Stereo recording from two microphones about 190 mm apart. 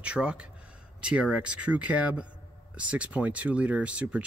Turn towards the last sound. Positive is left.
turn(degrees=-5)  # may be behind; listen again after turning